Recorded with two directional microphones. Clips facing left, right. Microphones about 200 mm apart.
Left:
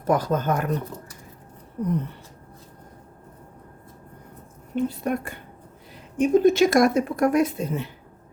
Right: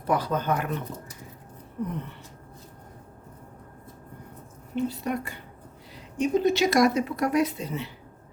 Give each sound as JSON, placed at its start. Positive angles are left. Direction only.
{"t": 0.0, "sound": "speech", "side_deg": 45}
{"t": 4.7, "sound": "speech", "side_deg": 50}